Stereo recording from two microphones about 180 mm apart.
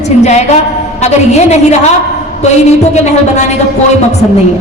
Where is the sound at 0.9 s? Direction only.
40° left (ahead or behind).